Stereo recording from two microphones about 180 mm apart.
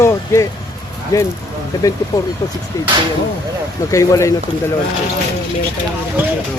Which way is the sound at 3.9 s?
15° left (ahead or behind).